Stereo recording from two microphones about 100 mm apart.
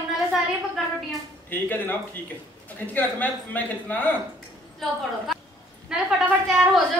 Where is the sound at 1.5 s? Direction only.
20° left (ahead or behind).